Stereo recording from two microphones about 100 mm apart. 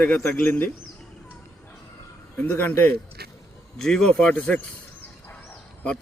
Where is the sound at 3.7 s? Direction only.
5° left (ahead or behind).